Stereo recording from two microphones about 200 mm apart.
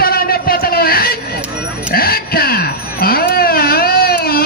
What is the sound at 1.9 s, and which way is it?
Baby cry, 50° left (ahead or behind).